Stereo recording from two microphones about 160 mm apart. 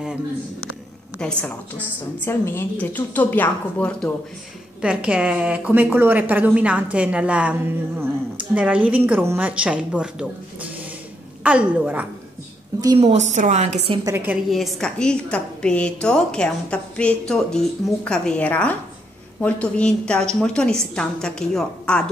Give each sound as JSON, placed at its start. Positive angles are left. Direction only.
{"t": 1.2, "sound": "a woman's voice", "side_deg": 5}
{"t": 4.8, "sound": "a woman's voice", "side_deg": -5}
{"t": 13.0, "sound": "a woman's voice", "side_deg": -45}
{"t": 14.0, "sound": "a woman's voice", "side_deg": -10}
{"t": 14.5, "sound": "a woman's voice", "side_deg": 0}